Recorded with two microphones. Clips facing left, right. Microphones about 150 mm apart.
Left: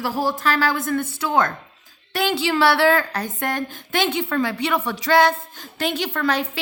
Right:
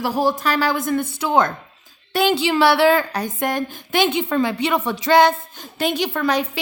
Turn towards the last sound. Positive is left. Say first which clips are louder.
# right 2 dB
turn(degrees=-15)  # may be behind; listen again after turning